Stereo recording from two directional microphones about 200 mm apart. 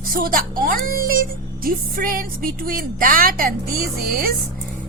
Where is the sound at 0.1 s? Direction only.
45° right (ahead or behind).